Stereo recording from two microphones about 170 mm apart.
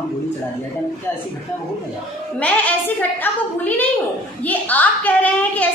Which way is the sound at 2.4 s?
10° left (ahead or behind).